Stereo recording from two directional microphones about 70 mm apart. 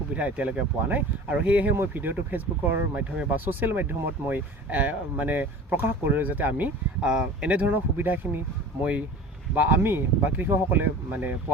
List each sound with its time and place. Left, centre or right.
0.1 s speech: right
7.0 s speech: centre
7.7 s speech: right